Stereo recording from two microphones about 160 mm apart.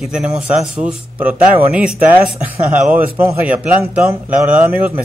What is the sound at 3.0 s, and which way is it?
Speech, 10° right (ahead or behind).